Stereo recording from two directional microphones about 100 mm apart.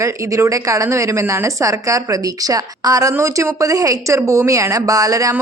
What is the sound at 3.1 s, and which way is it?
Speech, 30° right (ahead or behind).